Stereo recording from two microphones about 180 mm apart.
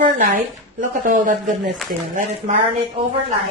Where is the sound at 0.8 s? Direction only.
45° right (ahead or behind).